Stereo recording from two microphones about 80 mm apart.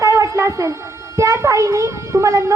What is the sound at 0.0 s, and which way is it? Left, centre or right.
A child's voice, right.